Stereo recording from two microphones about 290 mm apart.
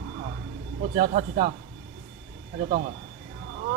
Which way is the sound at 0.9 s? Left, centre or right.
Right.